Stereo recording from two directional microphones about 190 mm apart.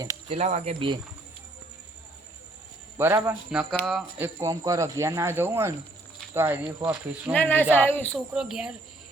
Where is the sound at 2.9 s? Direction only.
10° right (ahead or behind).